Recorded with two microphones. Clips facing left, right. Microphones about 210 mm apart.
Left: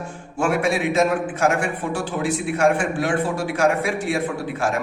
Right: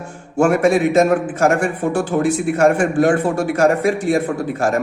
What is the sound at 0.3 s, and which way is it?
A man's voice, 45° right (ahead or behind).